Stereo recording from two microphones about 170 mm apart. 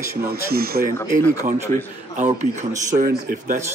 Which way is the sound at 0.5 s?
65° right (ahead or behind).